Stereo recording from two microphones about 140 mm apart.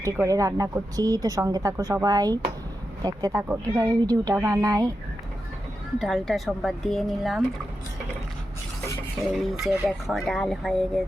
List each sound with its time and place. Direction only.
0.0 s speech: 20° right (ahead or behind)
6.0 s speech: centre (ahead or behind)
9.3 s speech: 5° right (ahead or behind)